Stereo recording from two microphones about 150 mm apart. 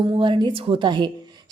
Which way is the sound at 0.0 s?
35° right (ahead or behind).